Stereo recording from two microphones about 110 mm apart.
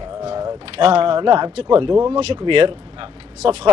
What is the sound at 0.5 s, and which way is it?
Speech, 60° right (ahead or behind).